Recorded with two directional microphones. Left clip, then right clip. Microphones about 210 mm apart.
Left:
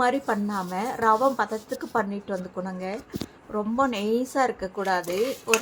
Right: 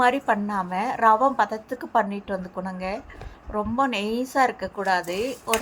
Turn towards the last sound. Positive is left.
turn(degrees=-5)  # may be behind; listen again after turning